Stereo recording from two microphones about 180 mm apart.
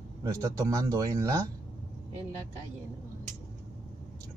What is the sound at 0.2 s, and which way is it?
Speech, 20° right (ahead or behind).